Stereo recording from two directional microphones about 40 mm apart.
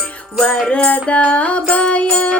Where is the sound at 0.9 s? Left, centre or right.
Left.